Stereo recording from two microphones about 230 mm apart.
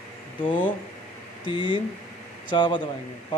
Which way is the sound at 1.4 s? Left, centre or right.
Left.